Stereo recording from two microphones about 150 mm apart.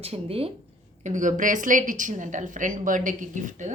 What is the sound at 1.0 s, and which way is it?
A woman's voice, 55° right (ahead or behind).